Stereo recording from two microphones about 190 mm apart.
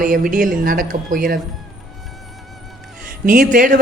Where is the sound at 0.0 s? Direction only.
45° right (ahead or behind).